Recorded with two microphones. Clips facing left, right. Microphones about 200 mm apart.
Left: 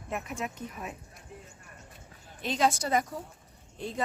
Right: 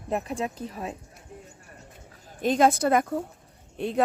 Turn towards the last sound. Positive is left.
turn(degrees=-65)  # may be behind; listen again after turning